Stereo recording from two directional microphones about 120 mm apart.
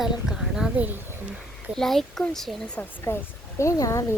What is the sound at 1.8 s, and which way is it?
Speech, 5° left (ahead or behind).